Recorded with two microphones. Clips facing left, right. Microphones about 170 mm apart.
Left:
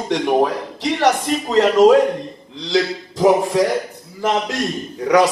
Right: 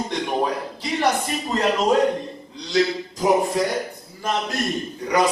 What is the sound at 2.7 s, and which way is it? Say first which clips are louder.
A man's voice: left 2 dB; 90° left.